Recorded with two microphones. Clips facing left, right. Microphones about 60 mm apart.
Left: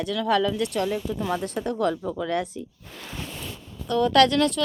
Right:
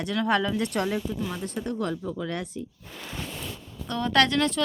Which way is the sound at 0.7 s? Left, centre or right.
Right.